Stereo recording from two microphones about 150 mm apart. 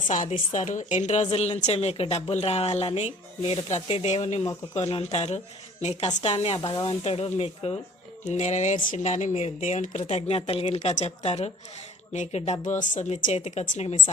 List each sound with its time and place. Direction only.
0.1 s a woman's voice: 55° left (ahead or behind)
6.3 s a woman's voice: 35° left (ahead or behind)